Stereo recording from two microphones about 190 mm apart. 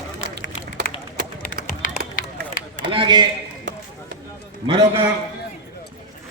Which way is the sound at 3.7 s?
70° right (ahead or behind).